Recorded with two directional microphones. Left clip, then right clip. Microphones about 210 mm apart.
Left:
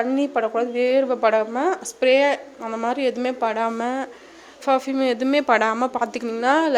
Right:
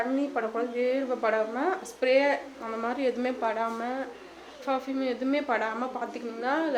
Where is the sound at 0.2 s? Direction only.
45° left (ahead or behind).